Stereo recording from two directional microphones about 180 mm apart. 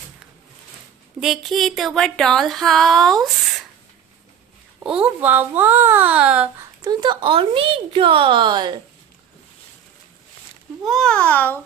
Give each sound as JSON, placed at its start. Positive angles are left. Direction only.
{"t": 1.2, "sound": "a sound", "side_deg": 0}
{"t": 4.8, "sound": "speech", "side_deg": -5}
{"t": 6.8, "sound": "a woman's voice", "side_deg": -25}
{"t": 10.8, "sound": "a child's voice", "side_deg": 0}